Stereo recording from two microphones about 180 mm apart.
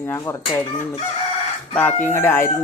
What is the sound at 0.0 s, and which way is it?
Speech, 15° left (ahead or behind).